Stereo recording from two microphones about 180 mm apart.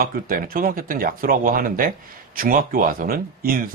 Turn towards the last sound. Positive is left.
turn(degrees=-55)  # may be behind; listen again after turning